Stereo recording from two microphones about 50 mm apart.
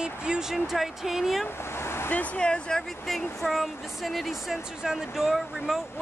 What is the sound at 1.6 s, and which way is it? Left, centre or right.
Vehicle, left.